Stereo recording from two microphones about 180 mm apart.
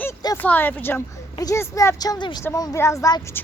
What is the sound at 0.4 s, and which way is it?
A woman's voice, 10° left (ahead or behind).